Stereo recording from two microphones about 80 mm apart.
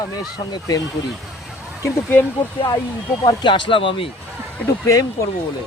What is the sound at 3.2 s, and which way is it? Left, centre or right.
Speech, left.